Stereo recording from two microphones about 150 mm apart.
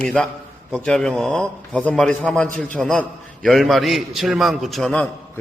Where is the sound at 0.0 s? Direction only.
5° left (ahead or behind).